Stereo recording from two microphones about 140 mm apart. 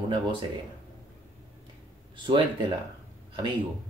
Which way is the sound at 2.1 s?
35° right (ahead or behind).